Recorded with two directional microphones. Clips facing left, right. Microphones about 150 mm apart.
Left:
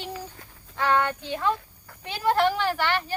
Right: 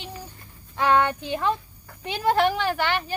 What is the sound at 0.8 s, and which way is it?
Speech, 15° right (ahead or behind).